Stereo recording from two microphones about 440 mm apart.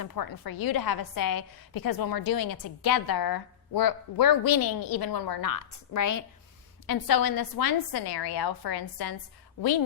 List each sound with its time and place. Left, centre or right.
0.0 s a woman's voice: left